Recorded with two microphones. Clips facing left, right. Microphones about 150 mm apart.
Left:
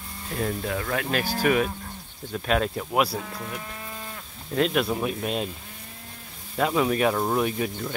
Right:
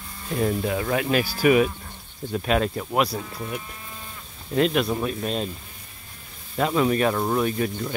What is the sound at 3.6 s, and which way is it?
Cattle, 80° left.